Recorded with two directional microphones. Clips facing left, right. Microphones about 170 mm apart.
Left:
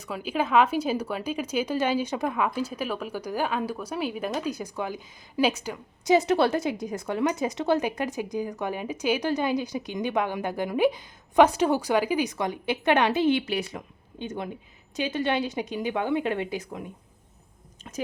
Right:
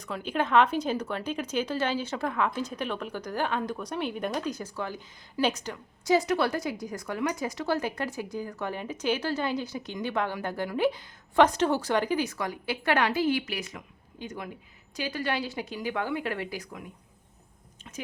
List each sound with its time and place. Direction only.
0.0 s a woman's voice: 5° left (ahead or behind); by 16.8 s 25° left (ahead or behind)
17.9 s speech: 45° left (ahead or behind)